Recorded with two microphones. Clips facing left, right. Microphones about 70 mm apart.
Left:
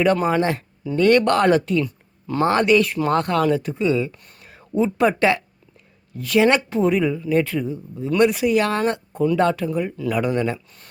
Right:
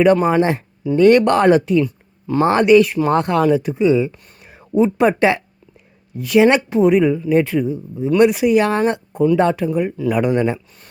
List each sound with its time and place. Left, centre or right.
0.0 s speech: centre
1.8 s a sound: centre
2.4 s speech: centre
3.1 s speech: right